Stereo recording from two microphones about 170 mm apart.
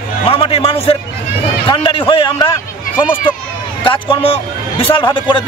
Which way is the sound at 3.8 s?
30° left (ahead or behind).